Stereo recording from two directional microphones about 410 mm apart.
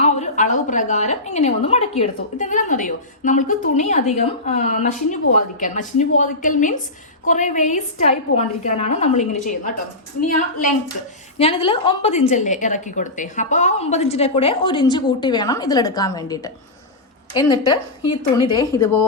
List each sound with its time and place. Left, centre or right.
0.0 s a woman's voice: centre
11.3 s a woman's voice: centre